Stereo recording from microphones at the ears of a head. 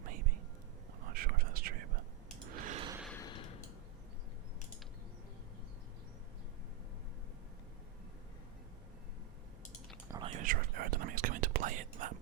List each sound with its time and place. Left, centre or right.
0.0 s whispering: right
3.2 s a sound: left
10.1 s whispering: right